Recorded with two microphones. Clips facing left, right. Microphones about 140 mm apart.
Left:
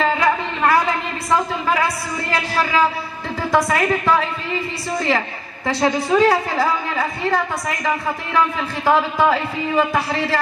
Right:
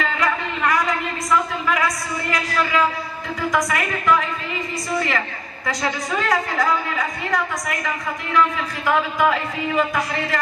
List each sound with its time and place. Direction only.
0.0 s a sound: 30° left (ahead or behind)
3.5 s speech: 30° left (ahead or behind)
5.7 s a woman's voice: 30° left (ahead or behind)
8.8 s speech: 30° left (ahead or behind)